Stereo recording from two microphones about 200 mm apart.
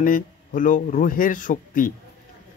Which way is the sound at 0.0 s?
40° left (ahead or behind).